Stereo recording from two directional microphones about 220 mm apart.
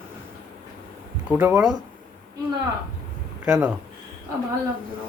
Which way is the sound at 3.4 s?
5° right (ahead or behind).